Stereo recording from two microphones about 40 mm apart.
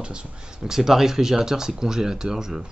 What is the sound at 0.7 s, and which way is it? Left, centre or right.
Speech, centre.